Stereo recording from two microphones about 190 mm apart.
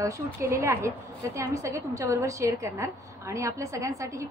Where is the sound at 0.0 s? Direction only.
15° right (ahead or behind).